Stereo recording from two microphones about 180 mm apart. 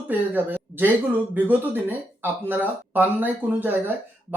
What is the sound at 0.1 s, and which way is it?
Speech, 10° right (ahead or behind).